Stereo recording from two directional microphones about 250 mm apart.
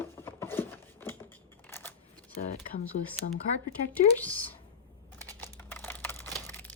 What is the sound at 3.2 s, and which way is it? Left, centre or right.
Speech, left.